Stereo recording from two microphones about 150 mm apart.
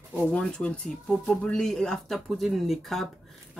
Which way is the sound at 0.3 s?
5° left (ahead or behind).